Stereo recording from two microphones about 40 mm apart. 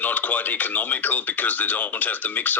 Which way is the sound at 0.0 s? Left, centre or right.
Left.